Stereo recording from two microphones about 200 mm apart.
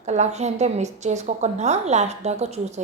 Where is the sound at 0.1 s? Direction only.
35° right (ahead or behind).